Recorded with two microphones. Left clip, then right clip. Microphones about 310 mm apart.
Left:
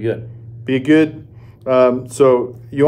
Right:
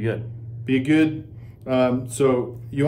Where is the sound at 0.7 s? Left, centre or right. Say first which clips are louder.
Left 6 dB; centre.